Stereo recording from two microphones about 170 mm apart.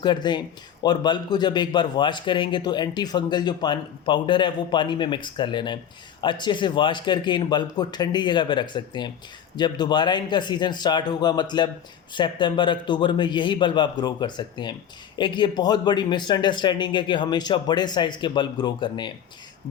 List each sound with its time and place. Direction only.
0.0 s speech: 25° left (ahead or behind)